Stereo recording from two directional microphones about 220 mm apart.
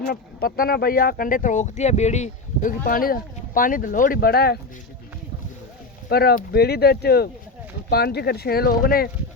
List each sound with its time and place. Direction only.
0.0 s speech: 45° left (ahead or behind)
6.1 s speech: 45° left (ahead or behind)